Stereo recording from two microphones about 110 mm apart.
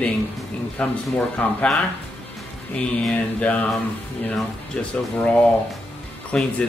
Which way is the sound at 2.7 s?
10° left (ahead or behind).